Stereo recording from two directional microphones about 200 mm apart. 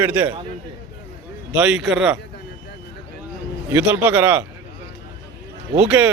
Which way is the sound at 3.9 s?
10° right (ahead or behind).